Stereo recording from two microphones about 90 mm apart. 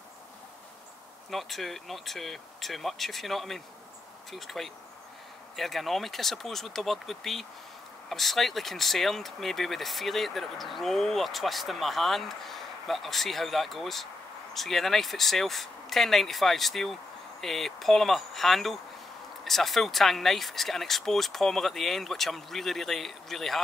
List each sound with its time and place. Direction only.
1.3 s speech: centre (ahead or behind)